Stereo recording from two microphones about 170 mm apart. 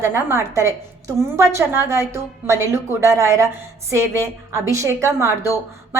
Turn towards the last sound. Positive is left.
turn(degrees=-15)  # may be behind; listen again after turning